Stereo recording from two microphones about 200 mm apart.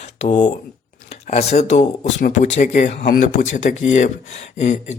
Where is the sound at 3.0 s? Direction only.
50° left (ahead or behind).